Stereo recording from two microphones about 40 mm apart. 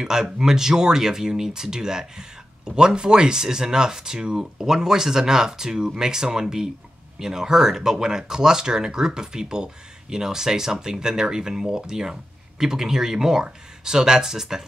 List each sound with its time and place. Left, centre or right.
0.0 s speech: centre